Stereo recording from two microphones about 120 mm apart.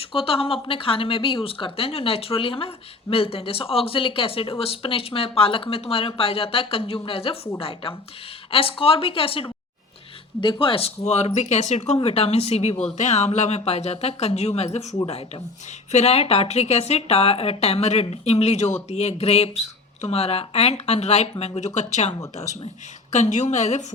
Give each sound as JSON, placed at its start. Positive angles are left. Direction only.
{"t": 0.0, "sound": "a woman's voice", "side_deg": 50}
{"t": 12.0, "sound": "a woman's voice", "side_deg": 60}
{"t": 15.9, "sound": "a woman's voice", "side_deg": 65}
{"t": 23.1, "sound": "a woman's voice", "side_deg": 85}